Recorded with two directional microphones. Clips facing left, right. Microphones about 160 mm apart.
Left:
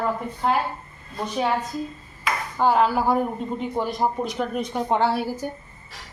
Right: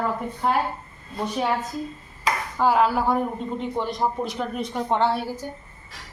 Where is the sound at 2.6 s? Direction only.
Centre (ahead or behind).